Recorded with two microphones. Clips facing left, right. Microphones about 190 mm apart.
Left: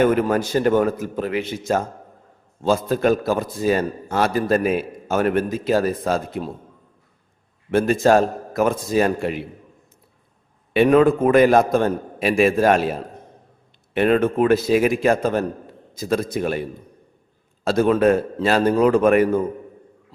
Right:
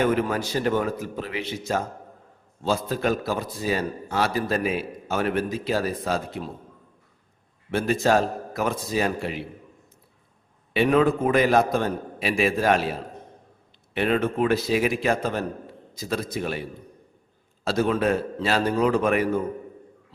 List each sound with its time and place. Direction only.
0.0 s a man's voice: 50° left (ahead or behind)
7.7 s a man's voice: 50° left (ahead or behind)
10.8 s a man's voice: 50° left (ahead or behind)
17.7 s a man's voice: 50° left (ahead or behind)